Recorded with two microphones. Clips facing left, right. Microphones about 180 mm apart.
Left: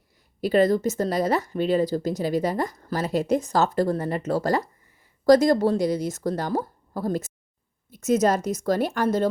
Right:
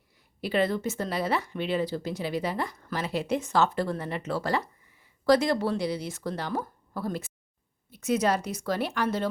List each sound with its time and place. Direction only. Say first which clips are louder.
0.4 s a woman's voice: left 7 dB; 40° left (ahead or behind)